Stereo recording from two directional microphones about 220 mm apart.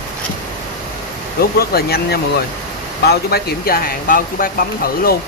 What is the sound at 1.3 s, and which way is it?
Speech, 45° left (ahead or behind).